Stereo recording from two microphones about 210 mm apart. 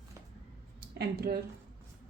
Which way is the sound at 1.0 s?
50° right (ahead or behind).